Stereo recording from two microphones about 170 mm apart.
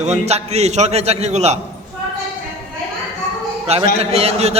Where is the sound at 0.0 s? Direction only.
40° right (ahead or behind).